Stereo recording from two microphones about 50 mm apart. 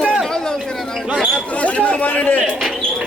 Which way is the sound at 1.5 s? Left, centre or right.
Left.